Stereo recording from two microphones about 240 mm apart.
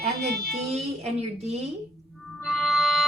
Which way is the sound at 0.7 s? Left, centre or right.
Right.